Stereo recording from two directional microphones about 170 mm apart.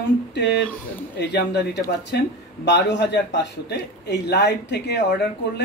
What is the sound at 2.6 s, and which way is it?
Speech, 90° left.